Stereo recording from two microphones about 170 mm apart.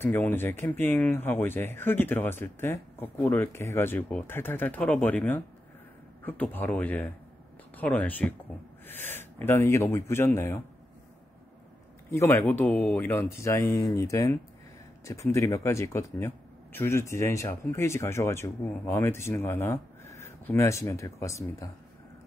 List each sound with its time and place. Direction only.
0.0 s speech: 10° left (ahead or behind)
12.1 s speech: 15° left (ahead or behind)